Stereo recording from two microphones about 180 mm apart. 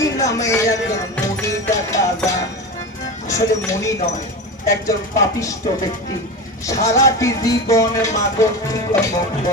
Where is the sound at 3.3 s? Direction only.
15° left (ahead or behind).